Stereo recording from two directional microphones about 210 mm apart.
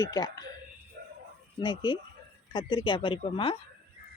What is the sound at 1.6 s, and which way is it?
Speech, 20° left (ahead or behind).